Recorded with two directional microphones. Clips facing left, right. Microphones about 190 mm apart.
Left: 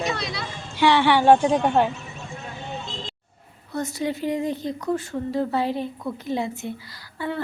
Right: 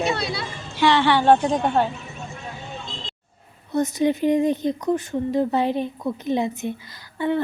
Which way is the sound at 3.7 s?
20° right (ahead or behind).